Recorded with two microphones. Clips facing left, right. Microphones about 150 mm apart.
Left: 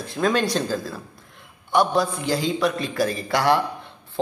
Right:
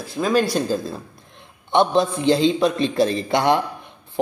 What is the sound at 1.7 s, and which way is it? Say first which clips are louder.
A man's voice: right 3 dB; 25° right (ahead or behind).